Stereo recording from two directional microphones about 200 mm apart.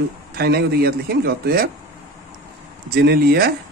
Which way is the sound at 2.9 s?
50° right (ahead or behind).